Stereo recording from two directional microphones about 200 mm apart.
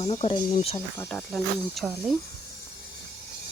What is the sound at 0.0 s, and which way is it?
Speech, 25° left (ahead or behind).